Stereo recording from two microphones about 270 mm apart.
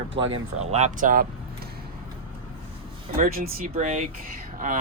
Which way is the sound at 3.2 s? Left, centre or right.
Right.